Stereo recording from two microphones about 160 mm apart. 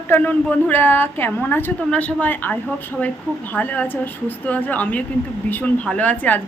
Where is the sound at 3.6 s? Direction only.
10° left (ahead or behind).